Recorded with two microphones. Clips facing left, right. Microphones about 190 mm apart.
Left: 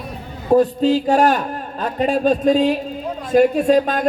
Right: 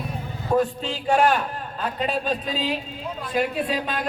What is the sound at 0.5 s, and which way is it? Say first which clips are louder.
A man's voice: left 9 dB; 40° left (ahead or behind).